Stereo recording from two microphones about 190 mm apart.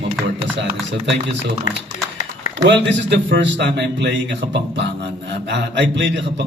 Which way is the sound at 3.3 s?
70° right (ahead or behind).